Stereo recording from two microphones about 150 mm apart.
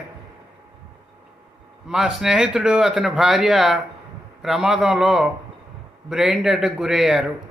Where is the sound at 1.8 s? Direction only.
5° right (ahead or behind).